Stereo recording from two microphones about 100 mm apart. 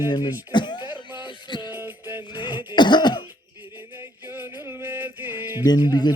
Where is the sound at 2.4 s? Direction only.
50° left (ahead or behind).